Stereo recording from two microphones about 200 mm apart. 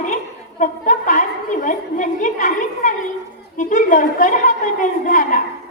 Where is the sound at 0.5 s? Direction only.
40° left (ahead or behind).